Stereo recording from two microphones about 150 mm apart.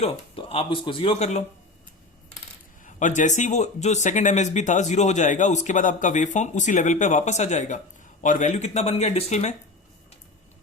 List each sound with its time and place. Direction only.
0.0 s speech: 40° left (ahead or behind)
2.8 s speech: 55° left (ahead or behind)